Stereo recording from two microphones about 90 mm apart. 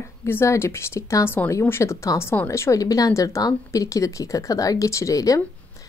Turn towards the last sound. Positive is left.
turn(degrees=40)  # may be behind; listen again after turning